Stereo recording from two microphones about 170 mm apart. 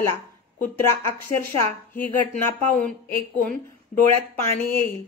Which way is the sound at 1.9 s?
10° left (ahead or behind).